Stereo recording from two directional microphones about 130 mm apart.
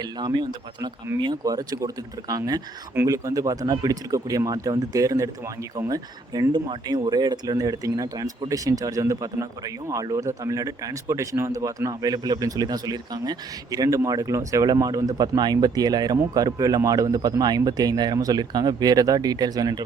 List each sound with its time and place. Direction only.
0.0 s speech: 35° right (ahead or behind)